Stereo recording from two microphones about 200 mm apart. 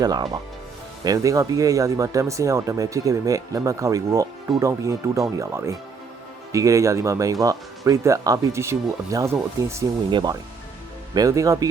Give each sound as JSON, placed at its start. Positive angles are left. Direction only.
{"t": 0.0, "sound": "speech", "side_deg": -20}